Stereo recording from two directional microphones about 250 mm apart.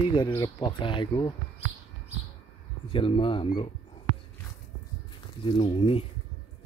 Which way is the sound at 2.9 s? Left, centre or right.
Left.